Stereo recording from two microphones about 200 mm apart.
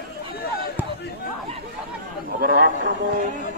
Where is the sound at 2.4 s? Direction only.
50° right (ahead or behind).